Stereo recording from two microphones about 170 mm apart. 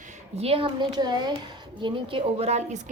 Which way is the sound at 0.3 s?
35° right (ahead or behind).